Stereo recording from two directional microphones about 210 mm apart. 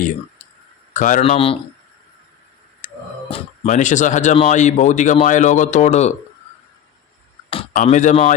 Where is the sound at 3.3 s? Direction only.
25° left (ahead or behind).